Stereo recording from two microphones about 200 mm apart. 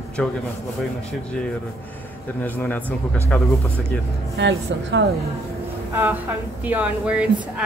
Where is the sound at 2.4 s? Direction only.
10° left (ahead or behind).